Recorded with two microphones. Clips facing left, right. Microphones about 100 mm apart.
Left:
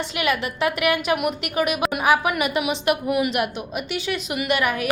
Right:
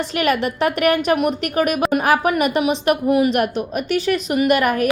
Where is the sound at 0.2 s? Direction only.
40° right (ahead or behind).